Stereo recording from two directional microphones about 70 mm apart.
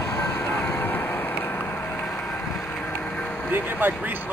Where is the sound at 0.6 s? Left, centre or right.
Left.